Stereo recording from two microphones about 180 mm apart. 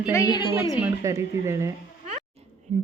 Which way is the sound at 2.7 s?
35° right (ahead or behind).